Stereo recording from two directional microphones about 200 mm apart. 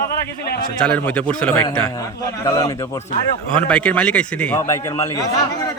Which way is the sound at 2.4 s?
15° left (ahead or behind).